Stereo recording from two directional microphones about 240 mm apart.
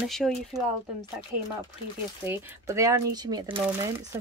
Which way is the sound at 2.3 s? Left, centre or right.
Centre.